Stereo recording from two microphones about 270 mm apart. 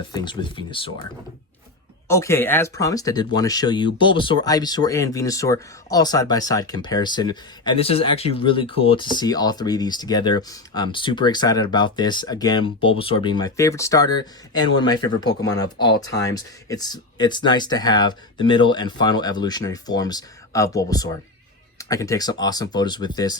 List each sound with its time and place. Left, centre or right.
0.0 s speech: centre
2.0 s speech: centre